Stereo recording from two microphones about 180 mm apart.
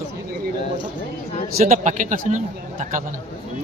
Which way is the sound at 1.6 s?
45° right (ahead or behind).